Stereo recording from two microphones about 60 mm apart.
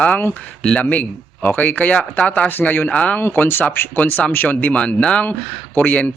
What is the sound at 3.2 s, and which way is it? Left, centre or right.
Speech, left.